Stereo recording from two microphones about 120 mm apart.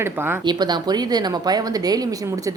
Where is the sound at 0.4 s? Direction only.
35° right (ahead or behind).